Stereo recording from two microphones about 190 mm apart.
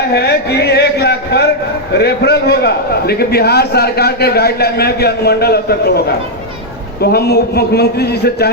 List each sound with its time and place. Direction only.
0.1 s a man's voice: 60° left (ahead or behind)
7.0 s a man's voice: 55° left (ahead or behind)